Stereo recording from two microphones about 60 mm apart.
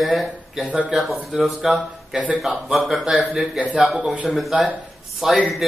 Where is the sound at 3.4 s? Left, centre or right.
Centre.